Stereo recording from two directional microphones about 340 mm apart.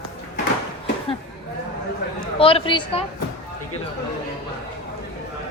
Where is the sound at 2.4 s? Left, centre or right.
Centre.